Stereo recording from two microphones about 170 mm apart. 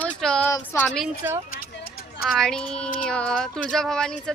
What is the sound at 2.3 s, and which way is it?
A woman's voice, 5° left (ahead or behind).